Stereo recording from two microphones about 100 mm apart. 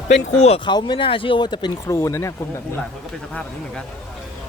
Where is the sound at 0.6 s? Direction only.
50° left (ahead or behind).